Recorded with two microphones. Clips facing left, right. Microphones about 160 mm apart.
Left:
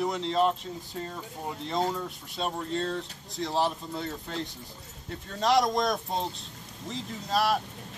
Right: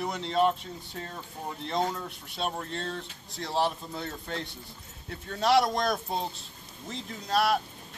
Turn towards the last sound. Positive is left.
turn(degrees=0)  # may be behind; listen again after turning